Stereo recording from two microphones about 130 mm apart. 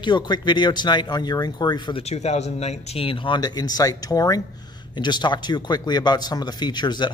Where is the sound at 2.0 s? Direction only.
55° left (ahead or behind); by 7.0 s 35° left (ahead or behind).